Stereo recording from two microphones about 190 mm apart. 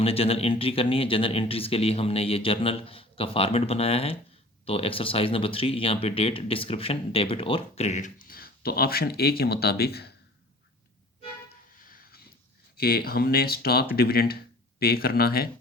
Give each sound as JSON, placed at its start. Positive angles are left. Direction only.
{"t": 0.0, "sound": "speech", "side_deg": 30}
{"t": 11.9, "sound": "a sound", "side_deg": 50}
{"t": 12.7, "sound": "speech", "side_deg": 55}